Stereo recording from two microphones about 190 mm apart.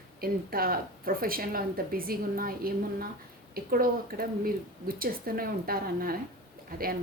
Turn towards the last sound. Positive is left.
turn(degrees=-50)  # may be behind; listen again after turning